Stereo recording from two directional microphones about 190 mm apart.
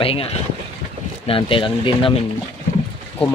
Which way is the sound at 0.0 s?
30° left (ahead or behind).